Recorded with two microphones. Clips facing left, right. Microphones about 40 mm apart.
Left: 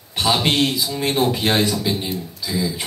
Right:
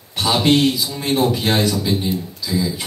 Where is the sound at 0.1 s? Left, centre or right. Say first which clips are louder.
Right 3 dB; left.